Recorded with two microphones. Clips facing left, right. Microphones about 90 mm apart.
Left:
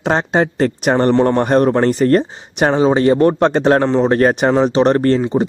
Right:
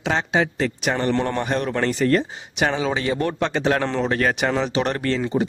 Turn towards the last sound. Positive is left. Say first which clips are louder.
# left 10 dB
turn(degrees=40)  # may be behind; listen again after turning